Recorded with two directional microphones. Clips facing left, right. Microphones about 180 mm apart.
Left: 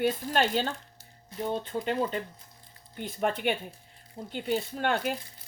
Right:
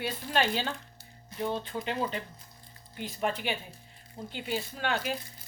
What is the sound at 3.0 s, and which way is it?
Speech, 50° left (ahead or behind).